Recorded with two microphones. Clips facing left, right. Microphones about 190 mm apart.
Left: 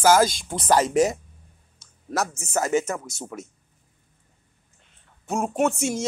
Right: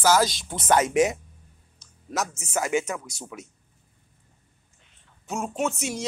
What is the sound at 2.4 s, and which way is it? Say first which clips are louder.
Speech: left 2 dB; 45° left (ahead or behind).